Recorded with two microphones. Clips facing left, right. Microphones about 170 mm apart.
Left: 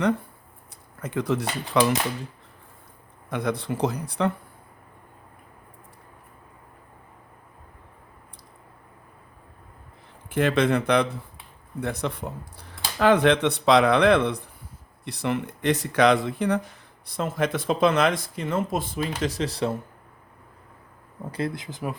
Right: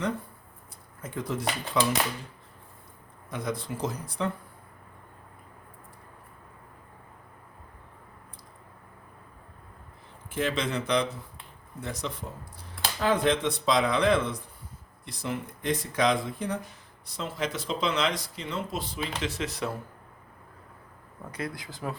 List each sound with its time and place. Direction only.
1.0 s speech: 75° left (ahead or behind)
3.2 s speech: 65° left (ahead or behind)
10.2 s speech: 60° left (ahead or behind)
13.0 s speech: 75° left (ahead or behind)
17.1 s speech: 55° left (ahead or behind); by 19.7 s 30° left (ahead or behind)
21.3 s speech: 25° left (ahead or behind)